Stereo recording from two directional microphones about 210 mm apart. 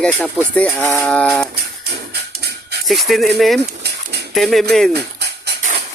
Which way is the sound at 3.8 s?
50° right (ahead or behind).